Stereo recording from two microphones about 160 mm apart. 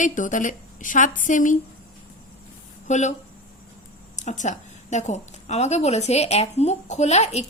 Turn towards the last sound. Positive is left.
turn(degrees=45)  # may be behind; listen again after turning